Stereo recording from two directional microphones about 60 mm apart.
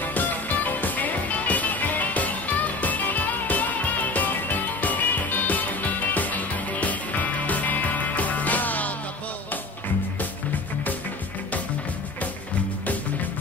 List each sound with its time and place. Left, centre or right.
0.7 s music: left